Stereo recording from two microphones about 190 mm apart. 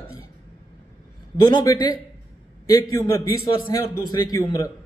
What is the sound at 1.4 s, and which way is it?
A man's voice, 20° left (ahead or behind).